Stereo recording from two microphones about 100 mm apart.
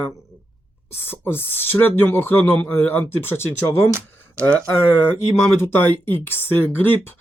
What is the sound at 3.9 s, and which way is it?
Speech, 25° right (ahead or behind).